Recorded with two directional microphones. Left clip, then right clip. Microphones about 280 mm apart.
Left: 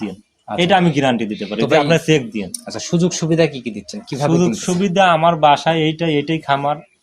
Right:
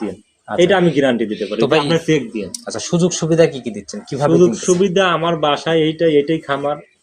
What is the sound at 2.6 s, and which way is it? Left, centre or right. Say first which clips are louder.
Speech: right 2 dB; centre.